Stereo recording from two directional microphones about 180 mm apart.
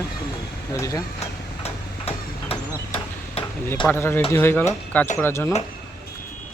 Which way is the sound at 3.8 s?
10° left (ahead or behind).